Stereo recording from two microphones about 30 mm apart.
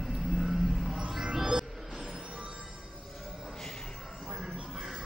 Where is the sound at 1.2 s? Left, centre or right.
Right.